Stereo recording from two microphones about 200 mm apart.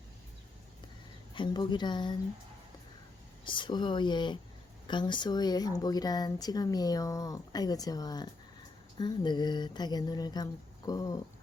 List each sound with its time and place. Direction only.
1.3 s speech: 20° left (ahead or behind)
3.4 s speech: 25° left (ahead or behind)